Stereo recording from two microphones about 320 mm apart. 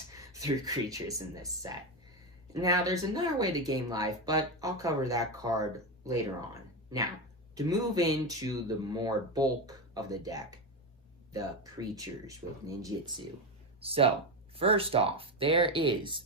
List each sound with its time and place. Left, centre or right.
0.3 s speech: centre